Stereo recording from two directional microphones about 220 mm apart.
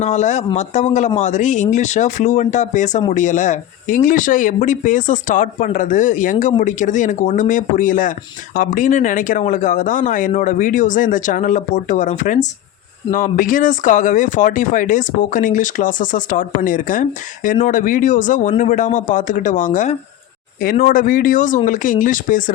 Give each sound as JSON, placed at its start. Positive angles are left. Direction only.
{"t": 0.0, "sound": "speech", "side_deg": 30}